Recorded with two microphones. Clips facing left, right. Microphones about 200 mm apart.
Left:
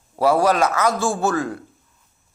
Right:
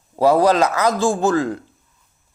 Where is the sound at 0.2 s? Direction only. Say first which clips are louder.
Right 3 dB; 20° right (ahead or behind).